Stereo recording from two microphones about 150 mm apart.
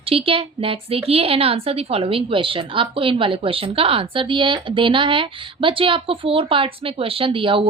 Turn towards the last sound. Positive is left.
turn(degrees=-35)  # may be behind; listen again after turning